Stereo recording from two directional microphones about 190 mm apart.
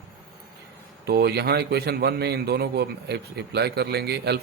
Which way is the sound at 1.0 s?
55° right (ahead or behind).